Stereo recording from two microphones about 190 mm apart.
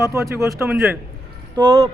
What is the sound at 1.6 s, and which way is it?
Speech, 30° right (ahead or behind).